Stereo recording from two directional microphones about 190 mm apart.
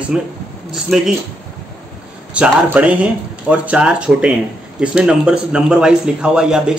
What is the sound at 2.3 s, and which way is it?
Speech, 5° right (ahead or behind).